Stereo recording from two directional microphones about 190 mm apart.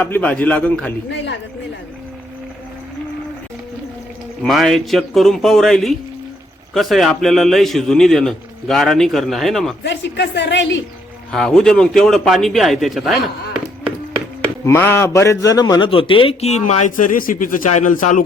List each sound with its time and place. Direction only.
0.0 s a man's voice: 10° left (ahead or behind)
1.1 s a woman's voice: 65° left (ahead or behind)
4.4 s a man's voice: centre (ahead or behind)
9.8 s speech: 65° left (ahead or behind)
11.3 s a man's voice: centre (ahead or behind)
14.7 s a man's voice: 10° left (ahead or behind); by 18.2 s 45° left (ahead or behind)